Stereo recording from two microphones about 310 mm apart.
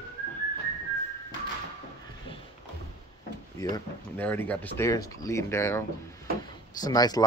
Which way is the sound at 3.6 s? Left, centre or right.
Centre.